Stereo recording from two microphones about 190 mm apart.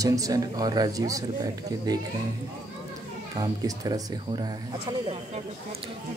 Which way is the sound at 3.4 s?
20° right (ahead or behind).